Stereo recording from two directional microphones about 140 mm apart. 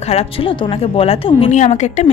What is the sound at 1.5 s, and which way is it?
Speech, 55° left (ahead or behind).